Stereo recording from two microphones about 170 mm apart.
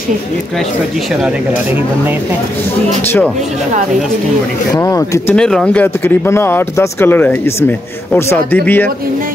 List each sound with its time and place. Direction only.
4.7 s speech: 20° left (ahead or behind)
5.3 s speech: 5° left (ahead or behind)